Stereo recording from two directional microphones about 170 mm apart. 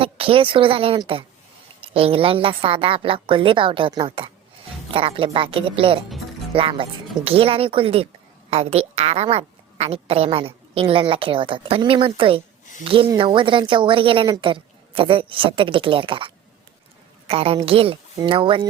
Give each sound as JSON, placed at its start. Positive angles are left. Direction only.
{"t": 0.0, "sound": "a woman's voice", "side_deg": -35}